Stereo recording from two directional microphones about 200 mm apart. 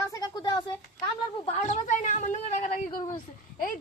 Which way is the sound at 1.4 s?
35° left (ahead or behind).